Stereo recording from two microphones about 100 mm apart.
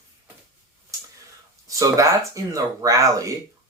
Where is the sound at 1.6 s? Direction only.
35° right (ahead or behind).